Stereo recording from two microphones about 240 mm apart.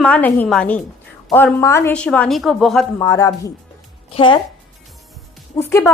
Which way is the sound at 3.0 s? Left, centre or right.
Centre.